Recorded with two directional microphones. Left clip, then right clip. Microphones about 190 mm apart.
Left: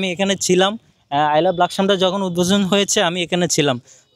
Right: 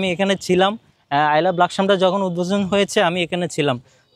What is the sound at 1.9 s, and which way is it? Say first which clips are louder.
Speech: right 1 dB; 25° left (ahead or behind).